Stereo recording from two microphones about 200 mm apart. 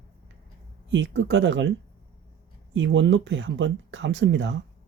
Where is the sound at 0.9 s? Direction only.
65° right (ahead or behind).